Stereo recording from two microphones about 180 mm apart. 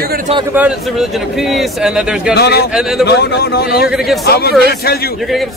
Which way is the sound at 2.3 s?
65° left (ahead or behind).